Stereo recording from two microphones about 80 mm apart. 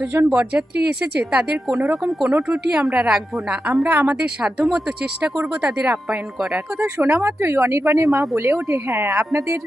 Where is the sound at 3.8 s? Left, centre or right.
Right.